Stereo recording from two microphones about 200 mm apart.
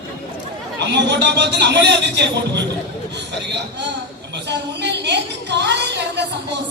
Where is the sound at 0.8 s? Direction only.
60° right (ahead or behind).